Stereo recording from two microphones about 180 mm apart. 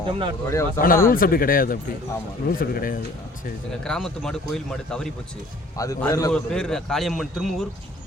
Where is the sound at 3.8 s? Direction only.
5° left (ahead or behind).